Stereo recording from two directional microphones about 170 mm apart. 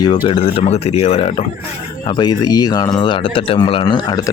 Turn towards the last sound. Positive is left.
turn(degrees=30)  # may be behind; listen again after turning